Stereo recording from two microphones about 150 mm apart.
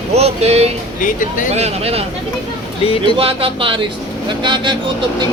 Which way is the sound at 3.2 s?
40° right (ahead or behind).